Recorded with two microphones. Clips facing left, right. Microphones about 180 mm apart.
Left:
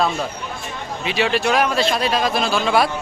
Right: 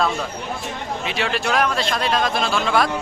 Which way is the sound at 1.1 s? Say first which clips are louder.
Left 5 dB; centre (ahead or behind).